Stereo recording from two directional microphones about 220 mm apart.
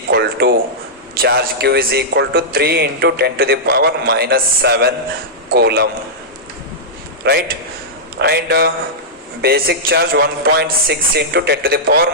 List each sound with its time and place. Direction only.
0.1 s a man's voice: 50° right (ahead or behind)
7.3 s a man's voice: 45° right (ahead or behind)